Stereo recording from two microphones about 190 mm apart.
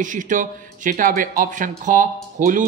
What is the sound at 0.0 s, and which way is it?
A man's voice, 40° right (ahead or behind).